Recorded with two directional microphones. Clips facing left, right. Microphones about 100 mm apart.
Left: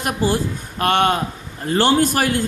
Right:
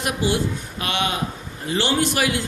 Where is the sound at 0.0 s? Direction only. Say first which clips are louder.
Left 2 dB; 45° left (ahead or behind).